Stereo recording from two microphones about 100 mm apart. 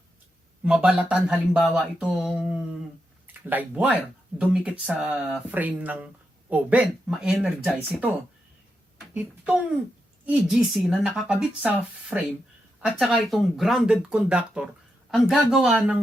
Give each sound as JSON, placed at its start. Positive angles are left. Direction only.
{"t": 0.6, "sound": "speech", "side_deg": -10}
{"t": 7.6, "sound": "speech", "side_deg": -15}
{"t": 9.1, "sound": "speech", "side_deg": -15}
{"t": 13.0, "sound": "speech", "side_deg": 0}